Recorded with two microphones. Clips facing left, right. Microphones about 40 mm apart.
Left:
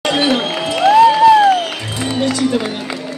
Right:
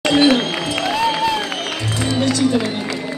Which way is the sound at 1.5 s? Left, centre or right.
Centre.